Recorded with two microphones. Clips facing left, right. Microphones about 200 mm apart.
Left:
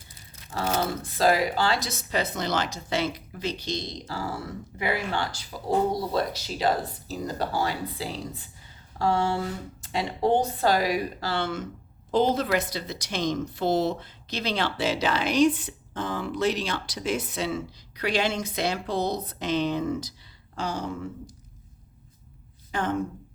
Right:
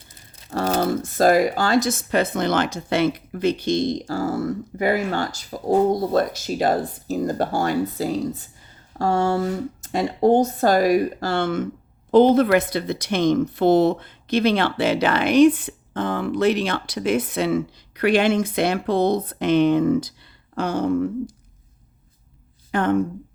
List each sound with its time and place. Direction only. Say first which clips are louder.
0.6 s speech: right 6 dB; 45° right (ahead or behind)
22.7 s a woman's voice: right 8 dB; 60° right (ahead or behind)